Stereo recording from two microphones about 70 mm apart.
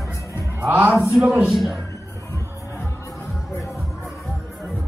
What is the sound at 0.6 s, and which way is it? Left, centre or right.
Speech, right.